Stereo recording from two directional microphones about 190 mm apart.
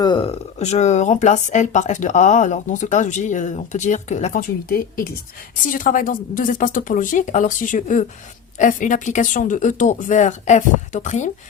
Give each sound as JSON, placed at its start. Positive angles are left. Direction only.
{"t": 0.0, "sound": "speech", "side_deg": 25}
{"t": 4.4, "sound": "speech", "side_deg": 50}